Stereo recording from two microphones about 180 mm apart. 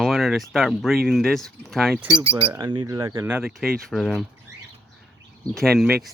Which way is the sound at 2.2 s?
30° right (ahead or behind).